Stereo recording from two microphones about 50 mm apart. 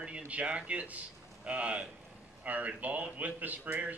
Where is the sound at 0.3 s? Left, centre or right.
Right.